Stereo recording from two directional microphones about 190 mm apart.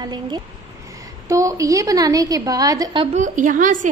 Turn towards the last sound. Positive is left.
turn(degrees=-45)  # may be behind; listen again after turning